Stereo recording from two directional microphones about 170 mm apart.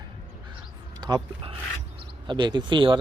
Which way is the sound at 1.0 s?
25° right (ahead or behind).